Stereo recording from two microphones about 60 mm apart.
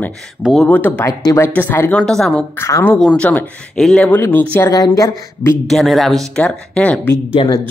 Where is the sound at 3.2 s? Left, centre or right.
Left.